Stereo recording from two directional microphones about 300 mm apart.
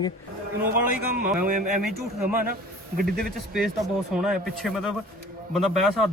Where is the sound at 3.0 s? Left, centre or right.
Centre.